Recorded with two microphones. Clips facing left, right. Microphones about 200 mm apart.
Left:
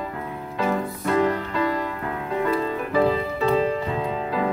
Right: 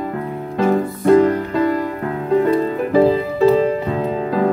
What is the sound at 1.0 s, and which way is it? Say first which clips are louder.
Music: right 10 dB; 45° right (ahead or behind).